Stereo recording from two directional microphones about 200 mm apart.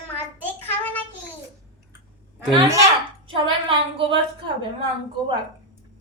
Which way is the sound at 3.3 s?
25° right (ahead or behind).